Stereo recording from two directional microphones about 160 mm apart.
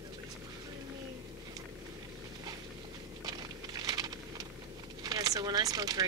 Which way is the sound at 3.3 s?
25° right (ahead or behind).